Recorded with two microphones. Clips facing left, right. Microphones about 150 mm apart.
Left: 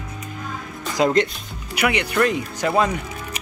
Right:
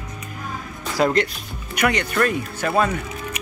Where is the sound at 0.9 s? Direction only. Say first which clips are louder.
Left 1 dB; 20° left (ahead or behind).